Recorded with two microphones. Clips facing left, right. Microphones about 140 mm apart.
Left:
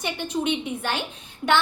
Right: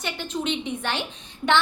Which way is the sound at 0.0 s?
15° left (ahead or behind).